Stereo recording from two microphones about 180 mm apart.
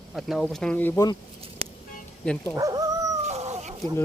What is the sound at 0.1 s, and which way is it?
Speech, centre (ahead or behind).